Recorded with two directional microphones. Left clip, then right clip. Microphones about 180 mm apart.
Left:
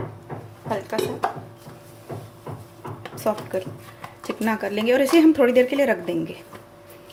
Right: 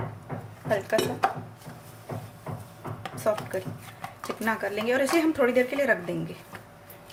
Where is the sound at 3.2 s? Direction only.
25° left (ahead or behind).